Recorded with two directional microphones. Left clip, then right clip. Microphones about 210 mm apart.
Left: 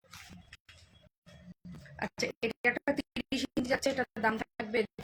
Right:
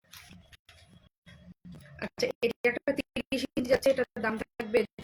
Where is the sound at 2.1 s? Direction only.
10° left (ahead or behind).